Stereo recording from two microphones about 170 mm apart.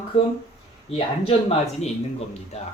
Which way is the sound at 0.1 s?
35° left (ahead or behind).